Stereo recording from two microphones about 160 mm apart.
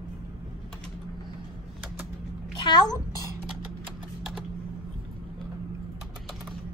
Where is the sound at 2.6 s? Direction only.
30° left (ahead or behind).